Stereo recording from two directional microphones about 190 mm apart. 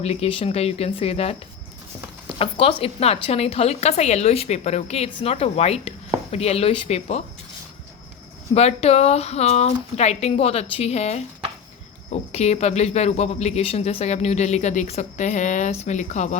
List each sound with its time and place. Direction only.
0.0 s speech: 35° left (ahead or behind)
2.4 s speech: 30° left (ahead or behind)
8.5 s speech: 35° left (ahead or behind)